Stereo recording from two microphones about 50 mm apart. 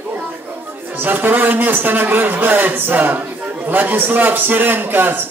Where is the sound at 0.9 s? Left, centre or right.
Right.